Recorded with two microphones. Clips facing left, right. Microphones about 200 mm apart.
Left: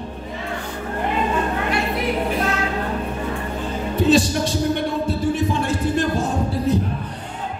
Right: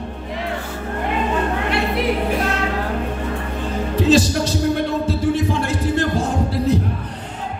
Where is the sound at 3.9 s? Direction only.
90° right.